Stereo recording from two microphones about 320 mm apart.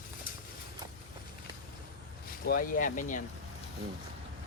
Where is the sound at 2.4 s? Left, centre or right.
Left.